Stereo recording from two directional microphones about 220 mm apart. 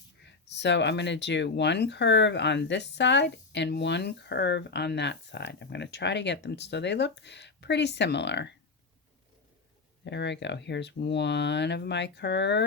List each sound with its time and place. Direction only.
0.3 s speech: 50° left (ahead or behind)
10.0 s speech: 50° left (ahead or behind)